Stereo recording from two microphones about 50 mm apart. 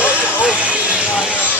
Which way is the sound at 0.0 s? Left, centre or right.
Right.